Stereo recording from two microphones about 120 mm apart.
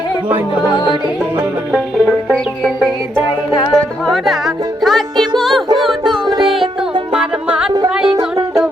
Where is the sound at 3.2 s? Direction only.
40° left (ahead or behind).